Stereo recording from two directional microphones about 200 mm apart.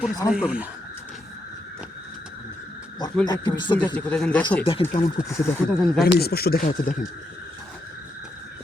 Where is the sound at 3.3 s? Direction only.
20° left (ahead or behind).